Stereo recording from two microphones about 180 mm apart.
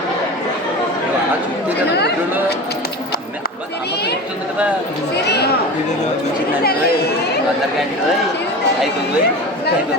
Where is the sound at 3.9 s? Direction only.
65° left (ahead or behind).